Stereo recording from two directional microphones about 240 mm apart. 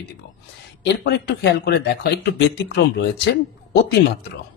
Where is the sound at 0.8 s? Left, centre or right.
Left.